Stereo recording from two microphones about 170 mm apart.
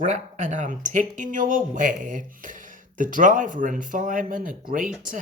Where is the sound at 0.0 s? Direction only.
45° right (ahead or behind).